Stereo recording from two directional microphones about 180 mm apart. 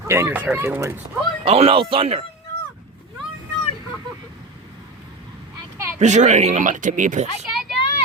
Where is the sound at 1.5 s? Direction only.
30° right (ahead or behind).